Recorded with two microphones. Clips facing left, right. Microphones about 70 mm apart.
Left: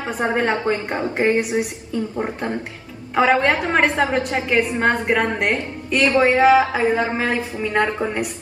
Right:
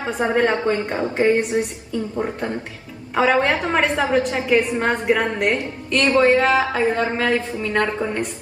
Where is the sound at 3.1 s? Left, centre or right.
Centre.